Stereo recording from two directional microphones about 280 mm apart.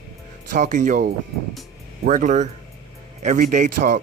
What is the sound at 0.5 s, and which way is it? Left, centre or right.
Speech, right.